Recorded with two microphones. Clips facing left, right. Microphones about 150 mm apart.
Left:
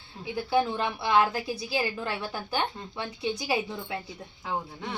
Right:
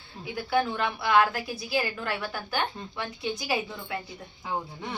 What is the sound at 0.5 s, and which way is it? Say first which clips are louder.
A woman's voice: even; 25° left (ahead or behind).